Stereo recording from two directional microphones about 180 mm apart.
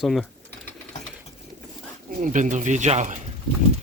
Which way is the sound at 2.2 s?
45° right (ahead or behind).